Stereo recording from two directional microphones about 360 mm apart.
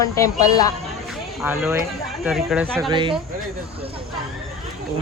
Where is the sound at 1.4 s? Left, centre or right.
Centre.